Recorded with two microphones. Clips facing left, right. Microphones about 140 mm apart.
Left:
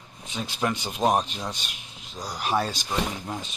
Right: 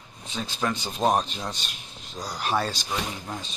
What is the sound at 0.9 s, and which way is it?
Speech, 5° left (ahead or behind).